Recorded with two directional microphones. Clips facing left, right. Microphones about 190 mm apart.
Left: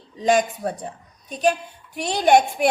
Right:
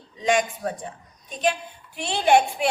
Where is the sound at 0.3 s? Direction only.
40° left (ahead or behind).